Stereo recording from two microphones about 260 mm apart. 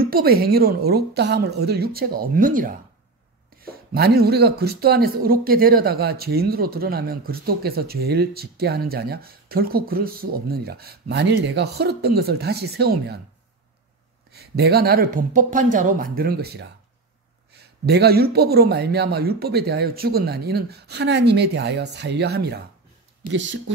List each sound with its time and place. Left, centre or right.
0.0 s speech: right
14.3 s speech: right